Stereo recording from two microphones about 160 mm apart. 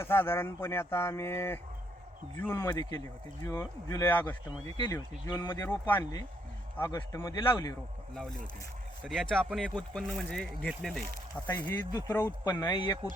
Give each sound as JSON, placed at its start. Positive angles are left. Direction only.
{"t": 0.0, "sound": "speech", "side_deg": 15}
{"t": 5.6, "sound": "speech", "side_deg": 10}
{"t": 9.0, "sound": "speech", "side_deg": 0}
{"t": 12.6, "sound": "speech", "side_deg": 25}